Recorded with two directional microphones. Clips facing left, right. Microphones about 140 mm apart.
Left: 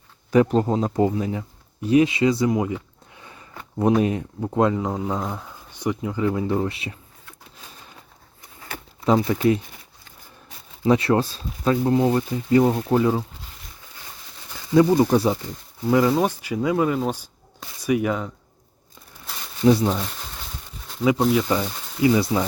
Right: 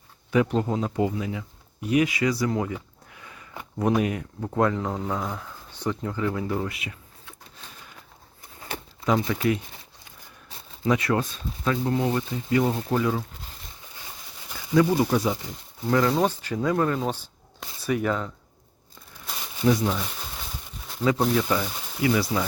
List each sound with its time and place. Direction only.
0.3 s speech: 40° left (ahead or behind); by 2.7 s 20° left (ahead or behind)
3.2 s a sound: 30° left (ahead or behind)
3.8 s speech: 25° left (ahead or behind)
6.2 s speech: 25° left (ahead or behind)
9.0 s speech: 30° left (ahead or behind)
10.8 s speech: 30° left (ahead or behind)
14.8 s speech: 25° left (ahead or behind)
15.9 s speech: 15° left (ahead or behind)
19.6 s speech: 30° left (ahead or behind)
21.2 s speech: centre (ahead or behind)
22.0 s speech: 25° left (ahead or behind)